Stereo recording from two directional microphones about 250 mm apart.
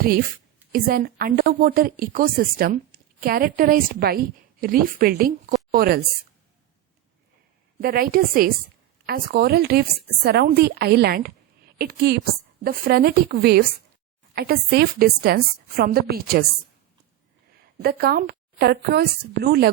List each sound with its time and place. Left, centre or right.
0.7 s a woman's voice: right
7.8 s a woman's voice: right
17.7 s a woman's voice: right